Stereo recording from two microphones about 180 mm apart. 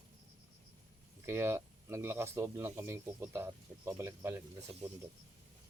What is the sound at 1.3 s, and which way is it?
Speech, 15° right (ahead or behind).